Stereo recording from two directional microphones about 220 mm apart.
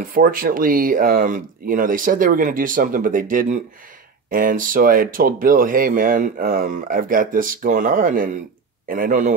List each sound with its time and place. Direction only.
0.0 s speech: 40° right (ahead or behind)